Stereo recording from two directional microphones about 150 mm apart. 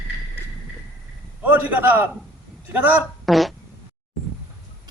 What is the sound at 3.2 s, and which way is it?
Fart, centre (ahead or behind).